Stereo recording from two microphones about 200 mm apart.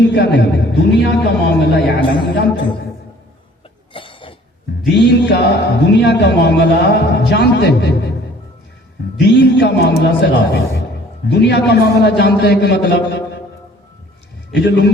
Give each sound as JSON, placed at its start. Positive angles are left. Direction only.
{"t": 0.0, "sound": "a man's voice", "side_deg": 55}
{"t": 3.9, "sound": "cough", "side_deg": 25}
{"t": 4.9, "sound": "speech", "side_deg": 60}
{"t": 9.2, "sound": "speech", "side_deg": 60}
{"t": 14.5, "sound": "speech", "side_deg": 60}